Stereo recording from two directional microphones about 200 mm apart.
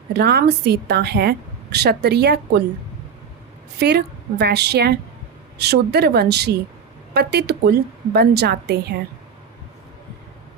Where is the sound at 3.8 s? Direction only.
55° right (ahead or behind).